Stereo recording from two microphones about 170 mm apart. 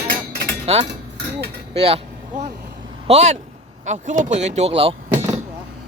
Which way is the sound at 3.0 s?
40° right (ahead or behind).